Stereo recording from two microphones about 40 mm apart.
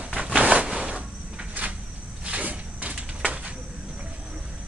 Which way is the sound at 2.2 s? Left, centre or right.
Right.